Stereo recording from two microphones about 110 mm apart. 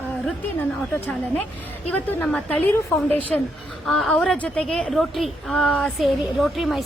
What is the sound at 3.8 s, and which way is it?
A woman's voice, centre (ahead or behind).